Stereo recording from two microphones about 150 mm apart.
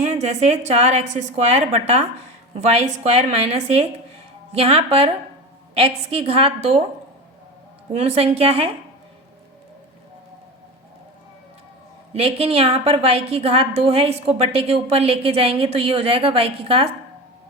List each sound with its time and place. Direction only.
0.0 s a woman's voice: 50° right (ahead or behind)
7.9 s a woman's voice: 45° right (ahead or behind)
12.1 s a woman's voice: 40° right (ahead or behind)